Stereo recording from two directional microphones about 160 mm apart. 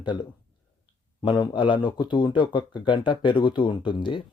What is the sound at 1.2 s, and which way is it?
Speech, 30° left (ahead or behind).